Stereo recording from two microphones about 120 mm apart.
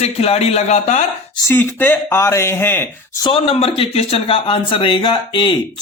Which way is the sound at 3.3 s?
55° left (ahead or behind).